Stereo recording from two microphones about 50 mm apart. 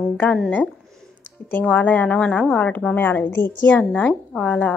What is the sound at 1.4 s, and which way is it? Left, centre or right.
A woman's voice, left.